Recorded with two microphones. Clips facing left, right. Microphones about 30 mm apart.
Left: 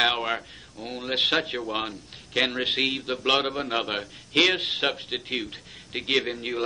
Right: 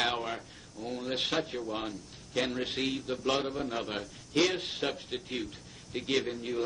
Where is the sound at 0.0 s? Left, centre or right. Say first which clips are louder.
Left 8 dB; left.